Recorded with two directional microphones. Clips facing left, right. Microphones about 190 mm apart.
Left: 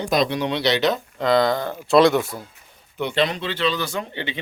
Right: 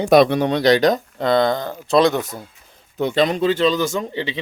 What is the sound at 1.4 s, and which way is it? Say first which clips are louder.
Speech: right 2 dB; 20° right (ahead or behind).